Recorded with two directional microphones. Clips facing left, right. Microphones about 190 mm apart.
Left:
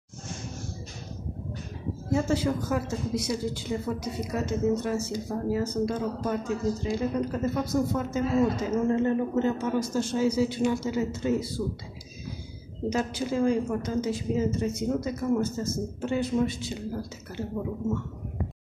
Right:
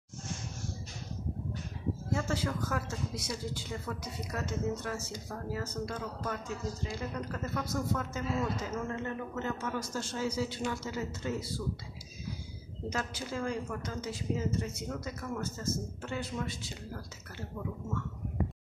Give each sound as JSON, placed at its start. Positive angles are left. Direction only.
{"t": 2.1, "sound": "a woman's voice", "side_deg": 20}
{"t": 12.9, "sound": "a woman's voice", "side_deg": 20}